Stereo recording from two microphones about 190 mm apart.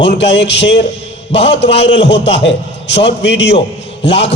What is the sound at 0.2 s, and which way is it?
A man's voice, 65° left (ahead or behind).